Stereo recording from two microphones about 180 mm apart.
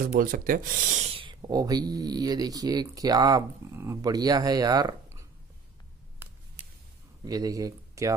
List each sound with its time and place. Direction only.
0.0 s speech: 50° right (ahead or behind)
1.1 s speech: 25° right (ahead or behind)
7.2 s speech: 20° right (ahead or behind)